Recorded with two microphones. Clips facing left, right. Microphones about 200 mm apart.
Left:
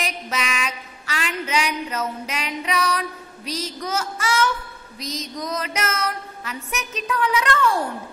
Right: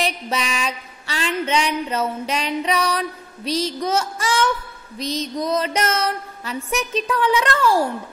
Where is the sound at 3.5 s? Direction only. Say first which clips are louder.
Right 6 dB; 30° right (ahead or behind).